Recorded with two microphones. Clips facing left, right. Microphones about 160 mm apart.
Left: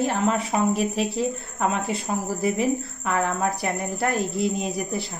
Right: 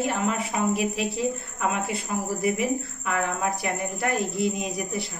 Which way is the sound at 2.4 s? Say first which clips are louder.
Left 2 dB; 35° left (ahead or behind).